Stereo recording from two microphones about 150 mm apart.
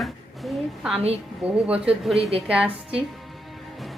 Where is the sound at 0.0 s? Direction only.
Centre (ahead or behind).